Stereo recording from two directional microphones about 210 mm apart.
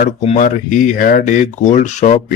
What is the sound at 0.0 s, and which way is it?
Speech, 40° left (ahead or behind).